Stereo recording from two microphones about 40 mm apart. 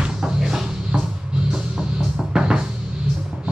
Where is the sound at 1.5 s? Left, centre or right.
Centre.